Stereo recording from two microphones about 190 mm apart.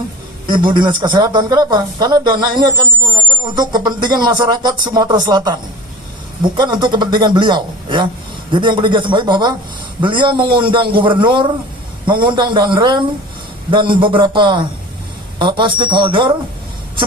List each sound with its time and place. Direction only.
0.4 s speech: 25° right (ahead or behind)